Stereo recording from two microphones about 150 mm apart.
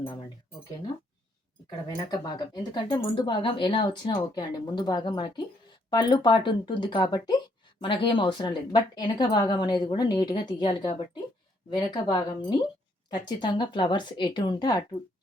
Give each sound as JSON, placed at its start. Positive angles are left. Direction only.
{"t": 2.0, "sound": "a woman's voice", "side_deg": 25}